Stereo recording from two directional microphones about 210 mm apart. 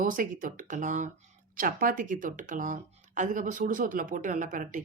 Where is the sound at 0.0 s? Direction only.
40° right (ahead or behind).